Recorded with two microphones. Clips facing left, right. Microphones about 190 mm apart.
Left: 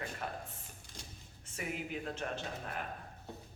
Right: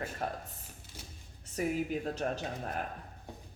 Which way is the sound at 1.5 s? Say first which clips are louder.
Right 8 dB; 40° right (ahead or behind).